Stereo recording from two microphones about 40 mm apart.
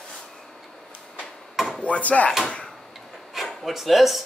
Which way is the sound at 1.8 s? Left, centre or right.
Left.